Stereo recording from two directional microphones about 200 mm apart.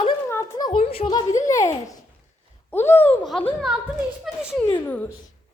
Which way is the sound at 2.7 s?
10° left (ahead or behind).